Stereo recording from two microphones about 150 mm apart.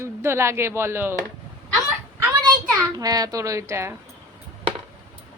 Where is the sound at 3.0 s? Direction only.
25° right (ahead or behind).